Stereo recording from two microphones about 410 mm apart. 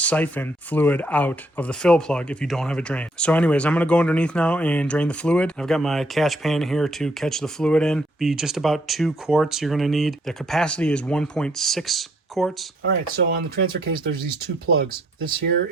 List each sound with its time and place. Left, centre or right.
0.0 s speech: centre
13.3 s speech: right